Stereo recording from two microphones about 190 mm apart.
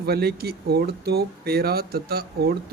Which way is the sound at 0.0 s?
55° right (ahead or behind).